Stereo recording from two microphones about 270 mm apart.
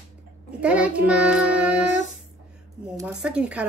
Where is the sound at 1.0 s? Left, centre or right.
Centre.